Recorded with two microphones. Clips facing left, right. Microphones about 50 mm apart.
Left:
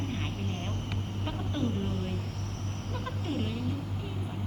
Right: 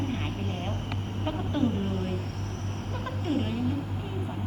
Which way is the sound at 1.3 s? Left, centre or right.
Centre.